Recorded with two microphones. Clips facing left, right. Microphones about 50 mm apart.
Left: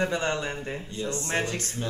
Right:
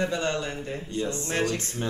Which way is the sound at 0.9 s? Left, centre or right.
Right.